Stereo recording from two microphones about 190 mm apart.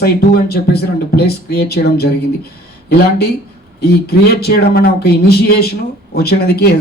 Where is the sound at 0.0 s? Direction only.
55° left (ahead or behind).